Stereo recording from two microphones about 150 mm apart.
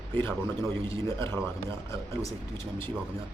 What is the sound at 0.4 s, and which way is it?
A man's voice, 20° left (ahead or behind).